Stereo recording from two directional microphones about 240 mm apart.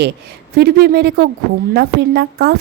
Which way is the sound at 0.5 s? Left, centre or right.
Right.